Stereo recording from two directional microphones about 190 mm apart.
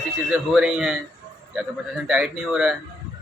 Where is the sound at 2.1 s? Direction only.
Centre (ahead or behind).